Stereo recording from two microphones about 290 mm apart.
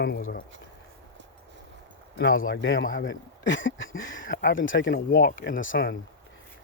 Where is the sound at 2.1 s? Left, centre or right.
Left.